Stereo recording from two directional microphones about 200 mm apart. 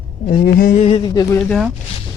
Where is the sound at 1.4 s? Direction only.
Centre (ahead or behind).